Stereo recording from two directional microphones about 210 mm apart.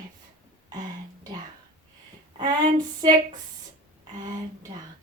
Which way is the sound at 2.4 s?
20° right (ahead or behind).